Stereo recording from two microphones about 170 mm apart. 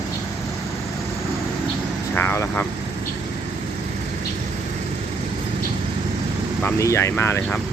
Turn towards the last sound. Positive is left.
turn(degrees=15)  # may be behind; listen again after turning